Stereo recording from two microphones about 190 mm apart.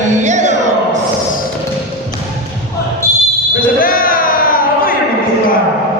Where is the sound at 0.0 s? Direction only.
40° right (ahead or behind).